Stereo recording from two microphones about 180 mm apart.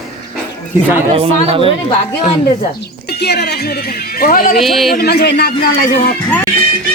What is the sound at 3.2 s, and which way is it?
Speech, 65° left (ahead or behind).